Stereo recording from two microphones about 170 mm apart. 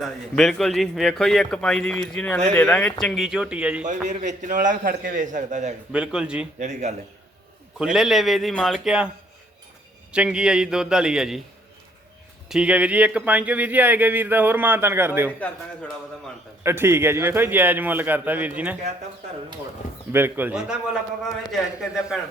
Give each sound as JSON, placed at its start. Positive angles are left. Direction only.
{"t": 0.0, "sound": "a man's voice", "side_deg": 0}
{"t": 4.1, "sound": "a man's voice", "side_deg": -45}
{"t": 5.9, "sound": "a man's voice", "side_deg": -5}
{"t": 6.6, "sound": "a man's voice", "side_deg": -45}
{"t": 7.9, "sound": "a man's voice", "side_deg": 0}
{"t": 10.1, "sound": "a man's voice", "side_deg": -5}
{"t": 12.5, "sound": "speech", "side_deg": -5}
{"t": 15.4, "sound": "a man's voice", "side_deg": 5}
{"t": 16.6, "sound": "speech", "side_deg": -15}
{"t": 20.1, "sound": "a man's voice", "side_deg": -10}